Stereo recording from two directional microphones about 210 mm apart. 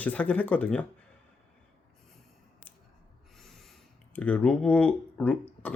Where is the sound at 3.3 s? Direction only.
Centre (ahead or behind).